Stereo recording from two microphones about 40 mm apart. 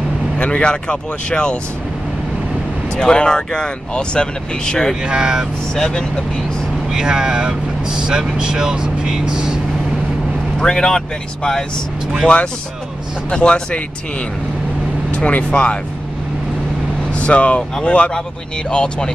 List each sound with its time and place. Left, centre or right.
0.4 s speech: left
3.0 s speech: centre
5.0 s speech: right
5.8 s speech: centre
6.9 s speech: centre
10.6 s speech: centre
13.3 s speech: left
15.0 s speech: left
17.1 s speech: left
18.7 s speech: left